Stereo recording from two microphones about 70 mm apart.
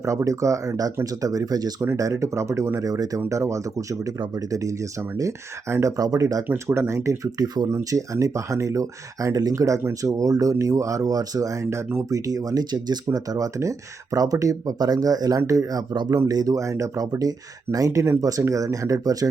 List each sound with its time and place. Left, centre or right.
0.0 s speech: right
1.8 s speech: right
3.2 s speech: right
6.0 s speech: right
6.7 s speech: right
7.3 s speech: right
7.7 s speech: right
11.6 s speech: right
14.8 s speech: right